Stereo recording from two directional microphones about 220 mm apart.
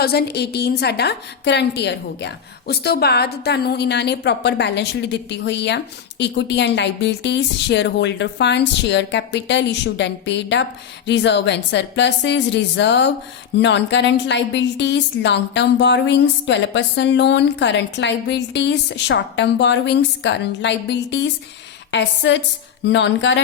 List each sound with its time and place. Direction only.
0.0 s a woman's voice: 45° left (ahead or behind)